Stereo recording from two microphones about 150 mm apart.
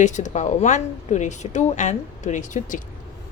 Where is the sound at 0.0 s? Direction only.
55° left (ahead or behind).